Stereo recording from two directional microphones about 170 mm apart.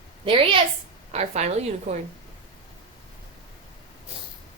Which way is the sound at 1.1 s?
40° right (ahead or behind).